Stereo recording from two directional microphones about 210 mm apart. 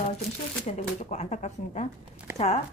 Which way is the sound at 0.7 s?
35° left (ahead or behind).